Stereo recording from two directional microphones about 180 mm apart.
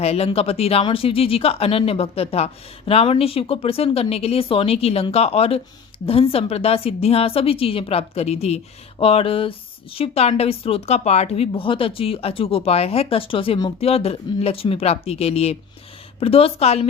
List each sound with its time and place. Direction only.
0.0 s a woman's voice: 35° left (ahead or behind)